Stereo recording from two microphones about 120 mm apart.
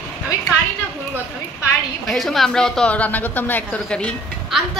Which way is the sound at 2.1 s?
Centre (ahead or behind).